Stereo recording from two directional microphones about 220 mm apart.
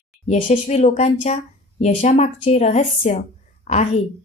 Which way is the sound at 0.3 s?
30° left (ahead or behind).